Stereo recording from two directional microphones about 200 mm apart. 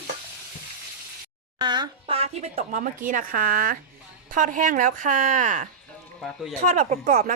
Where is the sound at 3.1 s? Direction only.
40° right (ahead or behind).